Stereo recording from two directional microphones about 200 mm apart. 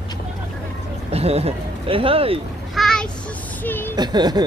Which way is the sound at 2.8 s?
5° left (ahead or behind).